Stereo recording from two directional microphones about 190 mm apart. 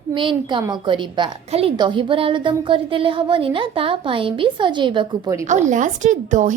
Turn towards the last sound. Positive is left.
turn(degrees=-40)  # may be behind; listen again after turning